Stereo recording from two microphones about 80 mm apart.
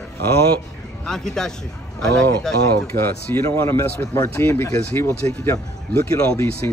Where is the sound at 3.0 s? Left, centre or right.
Left.